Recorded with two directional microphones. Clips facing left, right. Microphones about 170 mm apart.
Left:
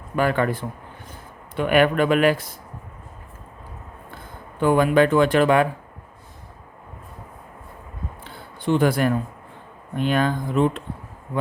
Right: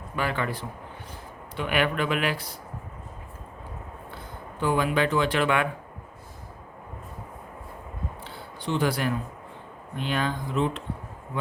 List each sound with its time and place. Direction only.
0.2 s speech: 50° left (ahead or behind)
4.6 s speech: 50° left (ahead or behind)
8.2 s a sound: 50° left (ahead or behind)
10.0 s speech: 50° left (ahead or behind)